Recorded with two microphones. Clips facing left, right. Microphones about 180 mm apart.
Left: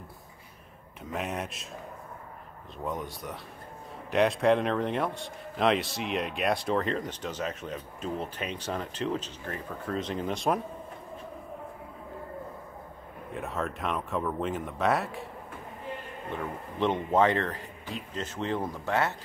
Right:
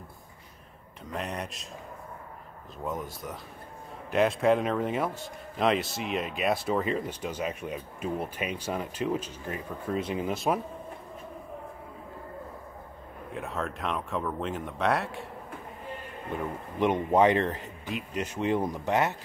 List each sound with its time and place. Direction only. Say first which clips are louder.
1.1 s a man's voice: left 1 dB; centre (ahead or behind)
2.8 s a man's voice: even; centre (ahead or behind)
13.3 s a man's voice: left 1 dB; centre (ahead or behind)
16.3 s speech: right 2 dB; 15° right (ahead or behind)